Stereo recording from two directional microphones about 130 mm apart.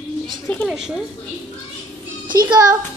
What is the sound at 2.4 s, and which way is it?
Speech, 30° right (ahead or behind).